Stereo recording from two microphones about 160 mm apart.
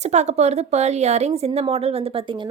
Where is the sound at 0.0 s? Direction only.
45° right (ahead or behind).